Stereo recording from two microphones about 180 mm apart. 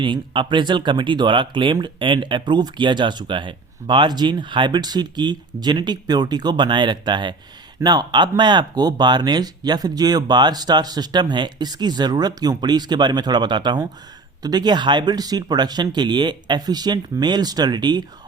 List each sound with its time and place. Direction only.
0.0 s speech: 25° right (ahead or behind)